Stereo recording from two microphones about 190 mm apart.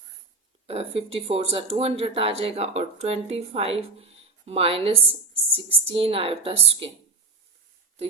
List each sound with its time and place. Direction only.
0.7 s a woman's voice: 30° right (ahead or behind)